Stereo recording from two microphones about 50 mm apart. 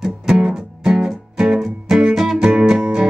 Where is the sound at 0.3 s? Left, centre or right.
Centre.